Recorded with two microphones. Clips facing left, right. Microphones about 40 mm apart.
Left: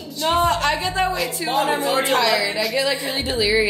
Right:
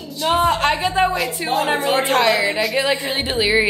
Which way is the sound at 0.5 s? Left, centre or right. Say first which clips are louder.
Right 3 dB; right.